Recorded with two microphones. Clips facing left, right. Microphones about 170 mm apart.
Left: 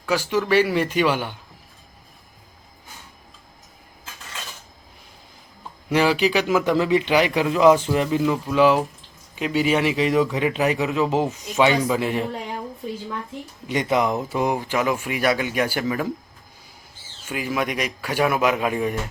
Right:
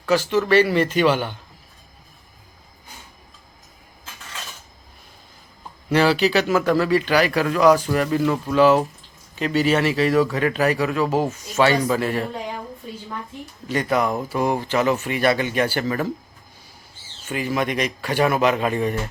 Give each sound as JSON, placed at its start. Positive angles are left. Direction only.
{"t": 0.0, "sound": "speech", "side_deg": 10}
{"t": 5.9, "sound": "speech", "side_deg": 10}
{"t": 8.2, "sound": "speech", "side_deg": 5}
{"t": 13.7, "sound": "speech", "side_deg": 20}
{"t": 17.2, "sound": "speech", "side_deg": 5}